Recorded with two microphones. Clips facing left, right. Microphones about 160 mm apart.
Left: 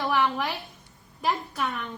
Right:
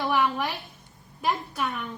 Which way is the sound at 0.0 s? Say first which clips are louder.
Even; 10° right (ahead or behind).